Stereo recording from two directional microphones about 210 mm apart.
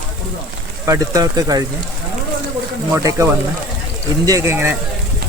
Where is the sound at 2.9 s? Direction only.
15° right (ahead or behind).